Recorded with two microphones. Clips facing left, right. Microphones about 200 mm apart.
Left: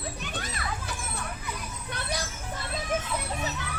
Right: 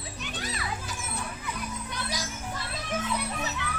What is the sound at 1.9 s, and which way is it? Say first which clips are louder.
Music: left 6 dB; 60° left (ahead or behind).